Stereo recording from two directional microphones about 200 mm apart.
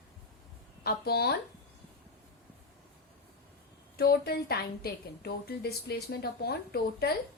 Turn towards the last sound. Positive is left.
turn(degrees=50)  # may be behind; listen again after turning